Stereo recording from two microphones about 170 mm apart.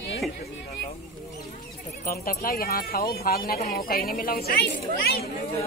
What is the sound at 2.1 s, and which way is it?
Speech, 60° left (ahead or behind).